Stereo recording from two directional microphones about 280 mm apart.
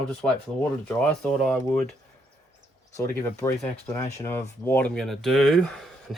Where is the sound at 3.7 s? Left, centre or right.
Left.